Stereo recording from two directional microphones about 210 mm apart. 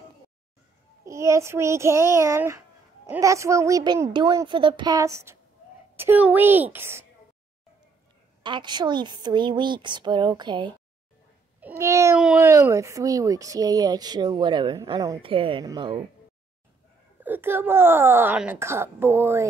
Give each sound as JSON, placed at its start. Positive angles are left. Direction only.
{"t": 1.0, "sound": "speech", "side_deg": -15}
{"t": 8.4, "sound": "a woman's voice", "side_deg": -20}
{"t": 17.2, "sound": "speech", "side_deg": -10}